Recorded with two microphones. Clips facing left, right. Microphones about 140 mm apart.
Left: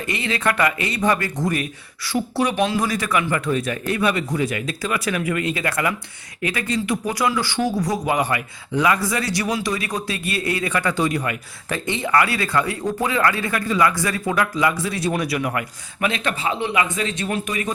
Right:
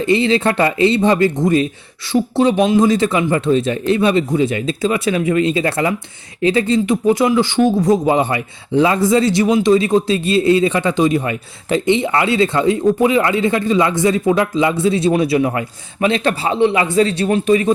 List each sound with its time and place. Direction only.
0.0 s speech: 30° right (ahead or behind)